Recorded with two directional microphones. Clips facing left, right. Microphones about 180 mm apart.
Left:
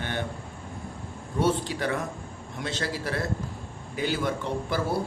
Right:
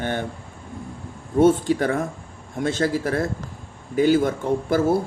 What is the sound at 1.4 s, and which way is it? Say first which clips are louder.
A man's voice: right 9 dB; 50° right (ahead or behind).